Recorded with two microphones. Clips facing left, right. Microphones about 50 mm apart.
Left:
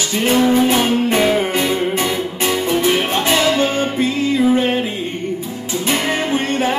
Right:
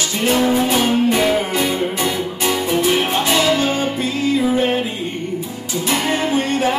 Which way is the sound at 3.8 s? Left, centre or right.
Left.